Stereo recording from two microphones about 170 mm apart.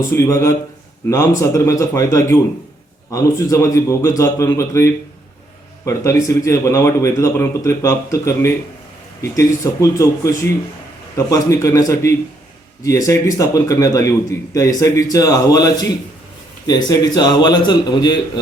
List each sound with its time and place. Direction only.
0.1 s a man's voice: 15° left (ahead or behind)